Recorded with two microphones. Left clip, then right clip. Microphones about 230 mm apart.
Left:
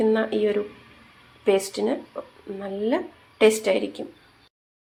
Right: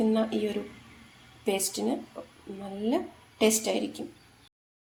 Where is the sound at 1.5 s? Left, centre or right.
Centre.